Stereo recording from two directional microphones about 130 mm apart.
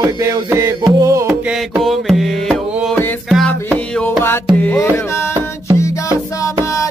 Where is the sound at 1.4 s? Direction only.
10° right (ahead or behind); by 5.3 s 20° left (ahead or behind).